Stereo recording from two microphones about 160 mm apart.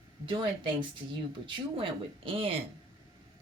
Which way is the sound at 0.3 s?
30° right (ahead or behind).